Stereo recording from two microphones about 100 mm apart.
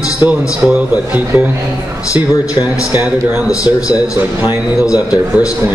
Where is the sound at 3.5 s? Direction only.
40° left (ahead or behind).